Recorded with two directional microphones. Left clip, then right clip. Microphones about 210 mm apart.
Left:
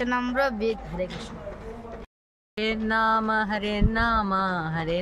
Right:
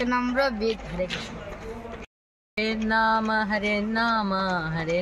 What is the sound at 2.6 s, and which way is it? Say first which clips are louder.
Speech: right 1 dB; 10° left (ahead or behind).